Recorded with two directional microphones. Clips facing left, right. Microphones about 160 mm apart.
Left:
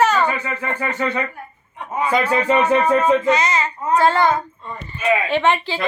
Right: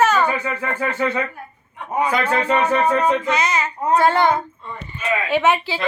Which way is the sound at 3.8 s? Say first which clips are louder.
Even; 20° right (ahead or behind).